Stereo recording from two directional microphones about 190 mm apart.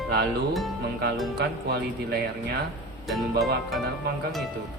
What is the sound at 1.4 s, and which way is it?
Speech, 60° right (ahead or behind).